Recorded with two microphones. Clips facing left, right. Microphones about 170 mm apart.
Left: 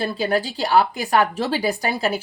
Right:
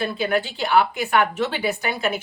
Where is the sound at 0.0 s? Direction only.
35° left (ahead or behind).